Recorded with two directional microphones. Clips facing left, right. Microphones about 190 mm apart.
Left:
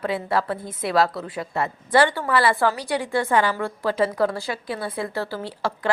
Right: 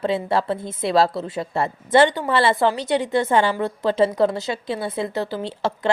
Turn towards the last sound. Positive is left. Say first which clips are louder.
# right 3 dB
turn(degrees=-25)  # may be behind; listen again after turning